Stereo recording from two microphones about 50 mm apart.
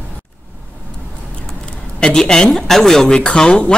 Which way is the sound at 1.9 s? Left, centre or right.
Centre.